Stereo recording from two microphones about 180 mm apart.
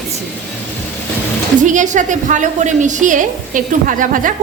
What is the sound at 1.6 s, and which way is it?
A woman's voice, 45° right (ahead or behind).